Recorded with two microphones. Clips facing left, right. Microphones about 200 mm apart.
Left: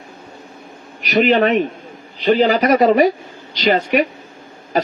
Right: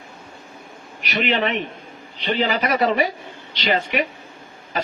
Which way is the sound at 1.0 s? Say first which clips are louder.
Left 8 dB; 40° left (ahead or behind).